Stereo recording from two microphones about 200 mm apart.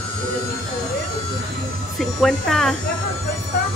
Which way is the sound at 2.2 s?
Centre (ahead or behind).